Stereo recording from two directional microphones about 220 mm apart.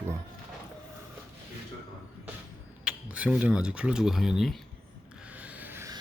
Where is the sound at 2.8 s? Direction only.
5° right (ahead or behind).